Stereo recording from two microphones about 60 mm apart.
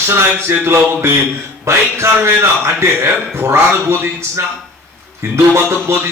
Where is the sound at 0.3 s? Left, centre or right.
Right.